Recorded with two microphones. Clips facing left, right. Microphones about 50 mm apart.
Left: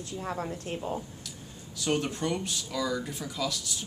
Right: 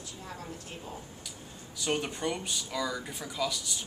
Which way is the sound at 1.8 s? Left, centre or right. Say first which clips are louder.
Left 2 dB; centre.